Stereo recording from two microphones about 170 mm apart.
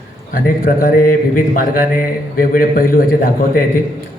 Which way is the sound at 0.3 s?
55° left (ahead or behind).